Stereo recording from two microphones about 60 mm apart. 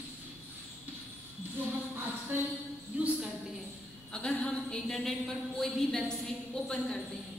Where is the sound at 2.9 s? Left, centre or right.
Right.